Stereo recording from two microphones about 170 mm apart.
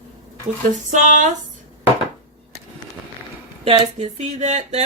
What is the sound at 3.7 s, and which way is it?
Speech, 40° right (ahead or behind).